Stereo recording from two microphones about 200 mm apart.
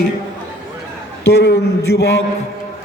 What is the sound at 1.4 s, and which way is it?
Speech, 55° left (ahead or behind).